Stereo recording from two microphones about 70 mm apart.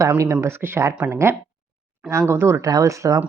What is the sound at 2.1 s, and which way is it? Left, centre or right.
Speech, right.